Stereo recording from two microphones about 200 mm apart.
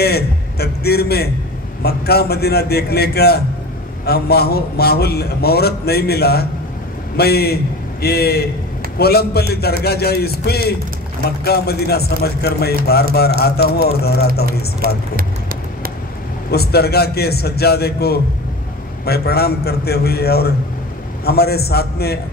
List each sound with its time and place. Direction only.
0.0 s a man's voice: 50° left (ahead or behind)
16.5 s a man's voice: 50° left (ahead or behind)